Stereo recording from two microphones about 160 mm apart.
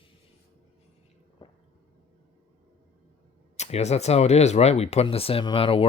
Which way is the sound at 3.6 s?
45° left (ahead or behind).